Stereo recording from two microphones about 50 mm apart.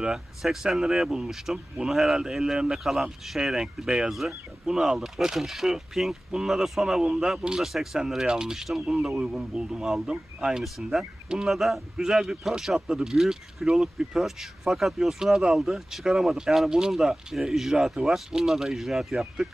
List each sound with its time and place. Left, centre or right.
0.0 s speech: centre
4.1 s speech: centre
9.1 s speech: centre